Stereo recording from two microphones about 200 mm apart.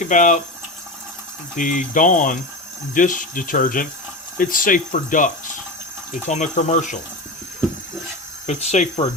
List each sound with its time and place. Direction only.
0.0 s speech: 40° left (ahead or behind)
1.5 s speech: 40° left (ahead or behind)
8.4 s speech: 35° left (ahead or behind)